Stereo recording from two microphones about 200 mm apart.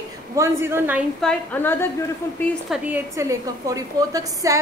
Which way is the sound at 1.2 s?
10° left (ahead or behind).